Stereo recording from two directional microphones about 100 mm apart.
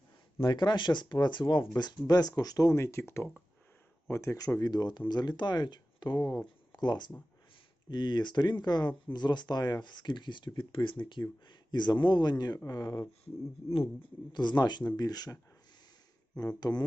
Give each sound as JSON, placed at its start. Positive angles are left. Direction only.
{"t": 0.3, "sound": "speech", "side_deg": 50}
{"t": 14.3, "sound": "speech", "side_deg": 45}
{"t": 16.6, "sound": "speech", "side_deg": 40}